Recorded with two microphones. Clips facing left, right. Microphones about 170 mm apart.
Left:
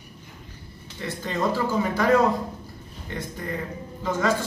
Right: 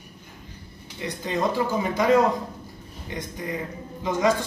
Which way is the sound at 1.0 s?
15° right (ahead or behind).